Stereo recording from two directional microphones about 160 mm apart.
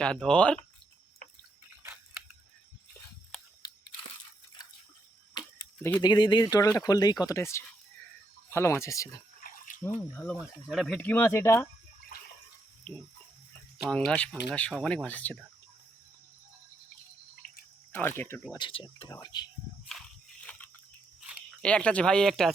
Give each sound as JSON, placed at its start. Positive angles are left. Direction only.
{"t": 0.0, "sound": "speech", "side_deg": 5}
{"t": 6.0, "sound": "speech", "side_deg": 30}
{"t": 9.4, "sound": "a sound", "side_deg": 60}
{"t": 9.8, "sound": "speech", "side_deg": 15}
{"t": 10.4, "sound": "speech", "side_deg": 0}
{"t": 12.9, "sound": "speech", "side_deg": 5}
{"t": 17.4, "sound": "drip", "side_deg": 65}
{"t": 17.9, "sound": "speech", "side_deg": 15}
{"t": 18.5, "sound": "speech", "side_deg": 30}
{"t": 20.4, "sound": "a sound", "side_deg": 10}
{"t": 21.6, "sound": "speech", "side_deg": 5}